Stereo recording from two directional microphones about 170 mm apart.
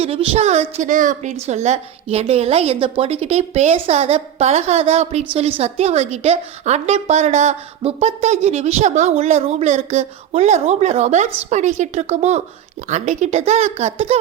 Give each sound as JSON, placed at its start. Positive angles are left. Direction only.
{"t": 0.0, "sound": "a woman's voice", "side_deg": -35}